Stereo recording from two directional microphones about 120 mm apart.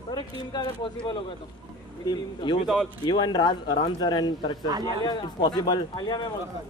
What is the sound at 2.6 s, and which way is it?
Speech, 5° right (ahead or behind).